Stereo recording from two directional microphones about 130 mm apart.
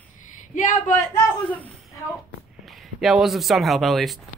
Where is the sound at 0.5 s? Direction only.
90° left.